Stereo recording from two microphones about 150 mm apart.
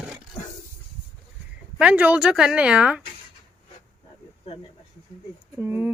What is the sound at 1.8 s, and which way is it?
A woman's voice, 10° right (ahead or behind).